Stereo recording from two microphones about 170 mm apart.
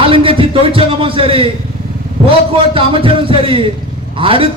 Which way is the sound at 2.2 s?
35° right (ahead or behind).